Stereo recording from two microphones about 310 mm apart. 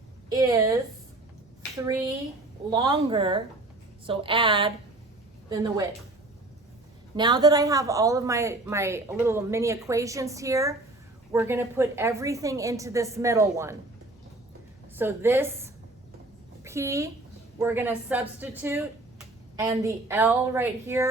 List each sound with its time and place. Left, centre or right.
0.3 s speech: centre
2.6 s speech: centre
7.2 s speech: centre
14.9 s a woman's voice: centre